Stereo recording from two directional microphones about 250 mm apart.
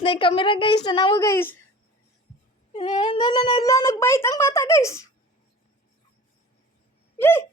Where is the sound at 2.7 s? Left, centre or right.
Centre.